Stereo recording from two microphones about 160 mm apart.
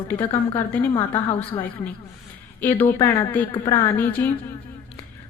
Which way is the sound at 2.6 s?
15° left (ahead or behind).